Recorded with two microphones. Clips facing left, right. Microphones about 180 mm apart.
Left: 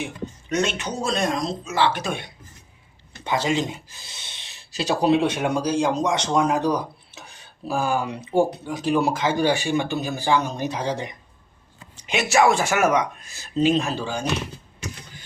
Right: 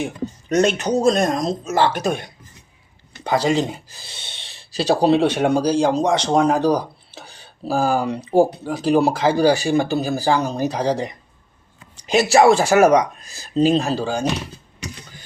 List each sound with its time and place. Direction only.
0.0 s speech: 40° right (ahead or behind)